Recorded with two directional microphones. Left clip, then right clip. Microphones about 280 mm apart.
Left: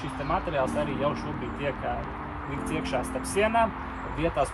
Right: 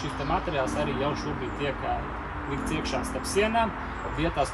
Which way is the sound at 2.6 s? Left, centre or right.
Centre.